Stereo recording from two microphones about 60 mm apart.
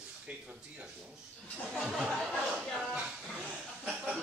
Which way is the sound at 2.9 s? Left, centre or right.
Centre.